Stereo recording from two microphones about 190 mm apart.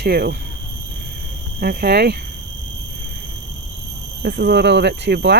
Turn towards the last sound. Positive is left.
turn(degrees=-65)  # may be behind; listen again after turning